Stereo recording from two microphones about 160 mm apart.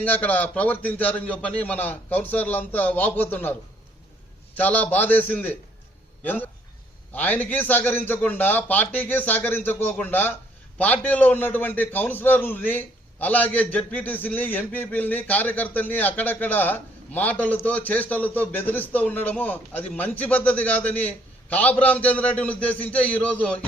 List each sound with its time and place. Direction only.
0.0 s a man's voice: 10° left (ahead or behind)
4.5 s a man's voice: 10° left (ahead or behind)